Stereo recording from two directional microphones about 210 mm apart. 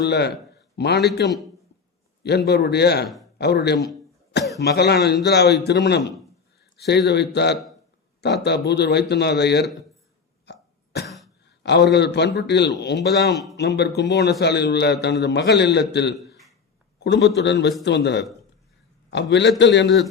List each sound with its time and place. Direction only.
0.0 s speech: 50° left (ahead or behind)
2.2 s speech: 50° left (ahead or behind)
10.4 s throat clearing: 50° left (ahead or behind)
11.4 s a man's voice: 55° left (ahead or behind)